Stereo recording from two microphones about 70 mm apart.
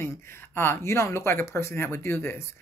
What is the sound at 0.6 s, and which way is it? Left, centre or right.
Speech, left.